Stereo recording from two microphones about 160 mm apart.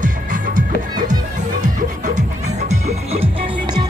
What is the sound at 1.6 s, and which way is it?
Music, 50° right (ahead or behind).